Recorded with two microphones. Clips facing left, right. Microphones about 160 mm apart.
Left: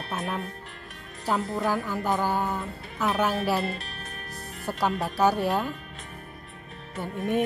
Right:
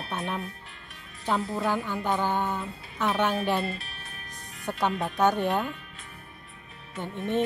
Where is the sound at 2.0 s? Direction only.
5° left (ahead or behind).